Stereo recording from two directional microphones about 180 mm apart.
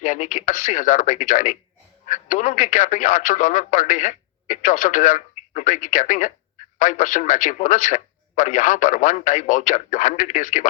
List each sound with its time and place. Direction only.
0.0 s speech: 45° left (ahead or behind)